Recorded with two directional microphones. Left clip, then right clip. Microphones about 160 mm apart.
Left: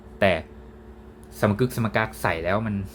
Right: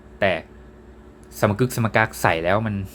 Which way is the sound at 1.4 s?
20° right (ahead or behind).